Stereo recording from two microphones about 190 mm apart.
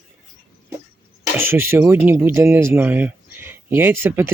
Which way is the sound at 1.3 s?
10° right (ahead or behind).